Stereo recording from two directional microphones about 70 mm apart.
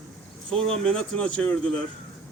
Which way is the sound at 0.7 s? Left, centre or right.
Centre.